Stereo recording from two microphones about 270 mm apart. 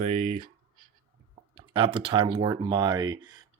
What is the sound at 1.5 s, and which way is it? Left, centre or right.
Speech, centre.